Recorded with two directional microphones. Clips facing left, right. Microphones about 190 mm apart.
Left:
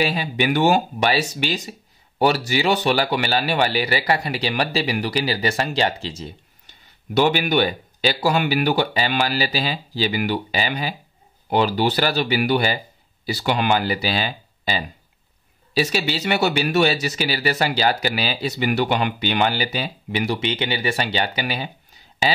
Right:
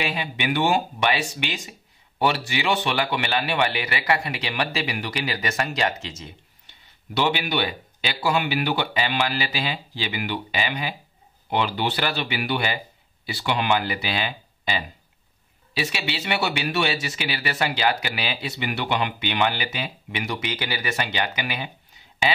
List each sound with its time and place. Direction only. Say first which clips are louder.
0.0 s speech: left 6 dB; 40° left (ahead or behind)
7.2 s speech: left 6 dB; 45° left (ahead or behind)